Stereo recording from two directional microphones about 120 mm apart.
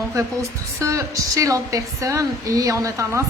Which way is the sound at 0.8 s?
25° right (ahead or behind).